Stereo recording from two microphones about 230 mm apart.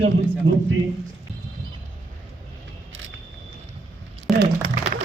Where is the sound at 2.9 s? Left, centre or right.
Right.